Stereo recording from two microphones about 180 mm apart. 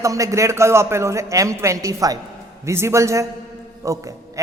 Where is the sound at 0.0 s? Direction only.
15° right (ahead or behind).